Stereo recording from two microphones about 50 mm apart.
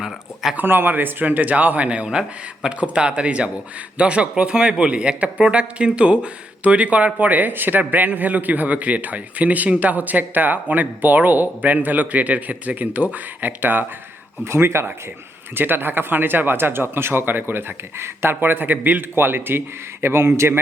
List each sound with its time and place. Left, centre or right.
0.5 s speech: right
14.4 s speech: right
15.5 s speech: right
19.1 s speech: right